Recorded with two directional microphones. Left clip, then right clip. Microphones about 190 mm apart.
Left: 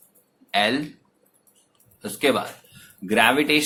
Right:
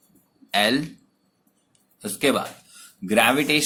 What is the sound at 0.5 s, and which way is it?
Speech, 30° right (ahead or behind).